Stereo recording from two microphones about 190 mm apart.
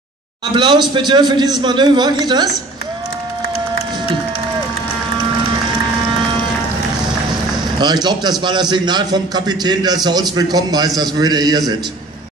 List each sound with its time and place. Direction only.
0.6 s a man's voice: 25° right (ahead or behind)
7.8 s a man's voice: 20° right (ahead or behind)